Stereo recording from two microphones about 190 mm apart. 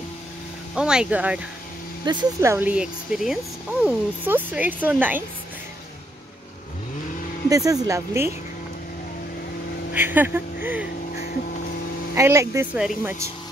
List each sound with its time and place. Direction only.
0.7 s speech: 5° right (ahead or behind)
2.0 s speech: 20° right (ahead or behind)
7.4 s speech: 15° right (ahead or behind)
9.9 s speech: 10° right (ahead or behind)
11.1 s a sound: 50° left (ahead or behind)
12.2 s speech: 15° right (ahead or behind)